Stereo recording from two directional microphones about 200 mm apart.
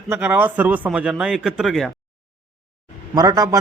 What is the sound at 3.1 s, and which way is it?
Speech, 20° right (ahead or behind).